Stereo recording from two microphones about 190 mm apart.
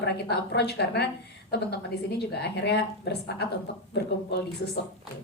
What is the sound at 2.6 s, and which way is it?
Speech, 60° left (ahead or behind).